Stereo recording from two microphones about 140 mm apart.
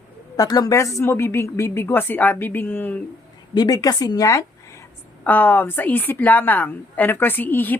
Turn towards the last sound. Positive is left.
turn(degrees=15)  # may be behind; listen again after turning